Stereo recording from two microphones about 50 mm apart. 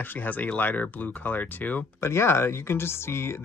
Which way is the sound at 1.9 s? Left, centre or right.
Left.